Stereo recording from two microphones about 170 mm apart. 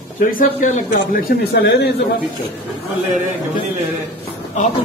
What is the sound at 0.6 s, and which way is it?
Speech, 50° left (ahead or behind).